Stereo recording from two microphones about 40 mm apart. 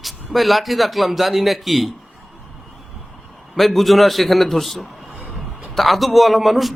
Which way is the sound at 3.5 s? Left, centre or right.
Centre.